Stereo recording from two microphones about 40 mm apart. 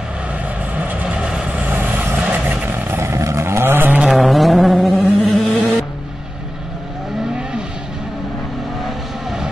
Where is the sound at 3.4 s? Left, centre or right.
Right.